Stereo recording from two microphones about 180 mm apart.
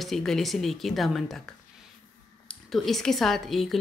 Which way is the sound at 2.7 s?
Centre (ahead or behind).